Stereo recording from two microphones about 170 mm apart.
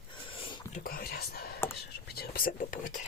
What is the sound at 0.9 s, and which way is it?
Whispering, 60° left (ahead or behind).